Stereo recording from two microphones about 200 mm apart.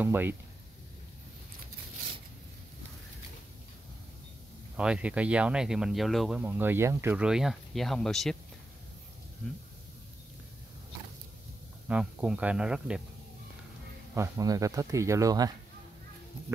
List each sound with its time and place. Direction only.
0.0 s speech: 10° right (ahead or behind)
4.7 s speech: 5° right (ahead or behind)
11.9 s speech: 5° right (ahead or behind)
14.1 s speech: 15° right (ahead or behind)